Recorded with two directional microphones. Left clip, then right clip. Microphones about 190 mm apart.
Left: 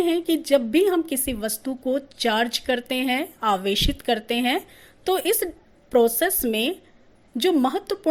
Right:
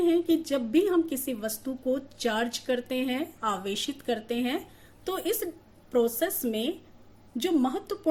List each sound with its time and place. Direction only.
0.0 s a woman's voice: 40° left (ahead or behind)